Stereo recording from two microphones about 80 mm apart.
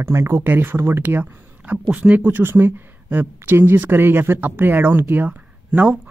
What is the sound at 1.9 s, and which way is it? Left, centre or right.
A woman's voice, centre.